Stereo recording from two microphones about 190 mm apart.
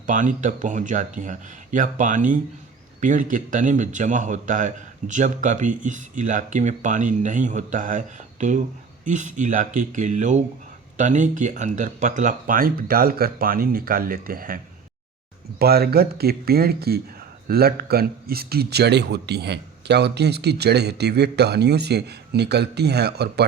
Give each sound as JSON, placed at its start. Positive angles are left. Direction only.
{"t": 0.1, "sound": "a man's voice", "side_deg": -40}